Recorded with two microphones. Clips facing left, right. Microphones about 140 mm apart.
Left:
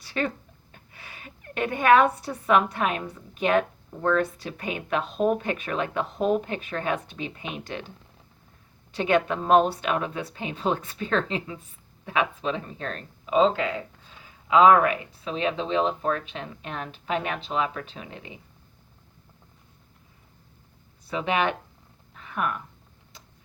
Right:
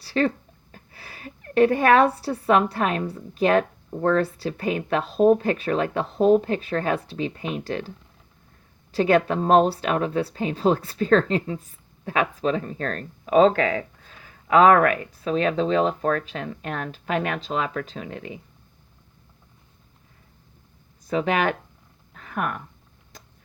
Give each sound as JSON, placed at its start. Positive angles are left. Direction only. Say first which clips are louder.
{"t": 0.0, "sound": "speech", "louder": "right 6 dB", "side_deg": -35}
{"t": 13.6, "sound": "speech", "louder": "right 5 dB", "side_deg": -75}
{"t": 14.4, "sound": "speech", "louder": "right 2 dB", "side_deg": -50}
{"t": 21.1, "sound": "speech", "louder": "right 3 dB", "side_deg": -40}
{"t": 22.2, "sound": "a sound", "louder": "right 1 dB", "side_deg": -40}